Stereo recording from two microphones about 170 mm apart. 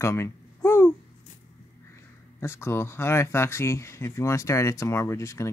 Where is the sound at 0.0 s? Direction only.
15° left (ahead or behind).